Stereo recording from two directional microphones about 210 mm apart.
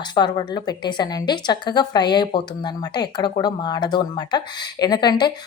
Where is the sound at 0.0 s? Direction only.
20° left (ahead or behind).